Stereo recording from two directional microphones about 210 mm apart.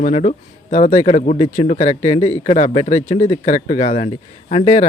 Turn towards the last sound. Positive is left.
turn(degrees=30)  # may be behind; listen again after turning